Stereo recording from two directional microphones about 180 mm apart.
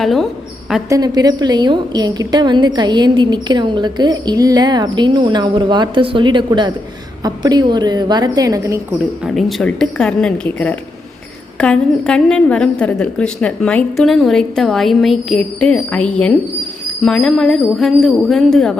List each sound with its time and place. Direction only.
0.0 s a woman's voice: centre (ahead or behind)
0.9 s a woman's voice: 20° right (ahead or behind)
9.2 s a woman's voice: centre (ahead or behind)